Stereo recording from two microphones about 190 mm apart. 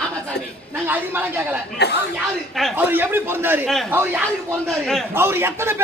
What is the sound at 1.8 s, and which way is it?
Speech, 60° left (ahead or behind).